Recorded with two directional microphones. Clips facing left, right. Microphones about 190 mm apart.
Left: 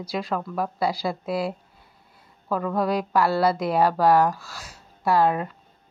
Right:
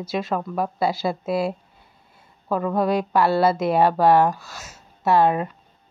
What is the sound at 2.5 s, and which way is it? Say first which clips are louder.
Speech: right 3 dB; 25° right (ahead or behind).